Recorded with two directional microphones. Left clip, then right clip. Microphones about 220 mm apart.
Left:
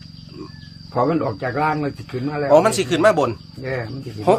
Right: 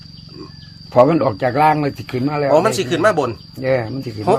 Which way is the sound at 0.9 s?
45° right (ahead or behind).